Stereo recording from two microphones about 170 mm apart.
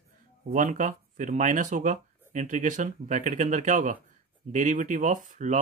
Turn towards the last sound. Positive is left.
turn(degrees=-50)  # may be behind; listen again after turning